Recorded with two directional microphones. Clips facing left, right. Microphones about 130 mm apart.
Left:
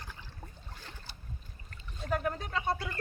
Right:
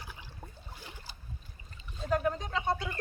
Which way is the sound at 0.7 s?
10° right (ahead or behind).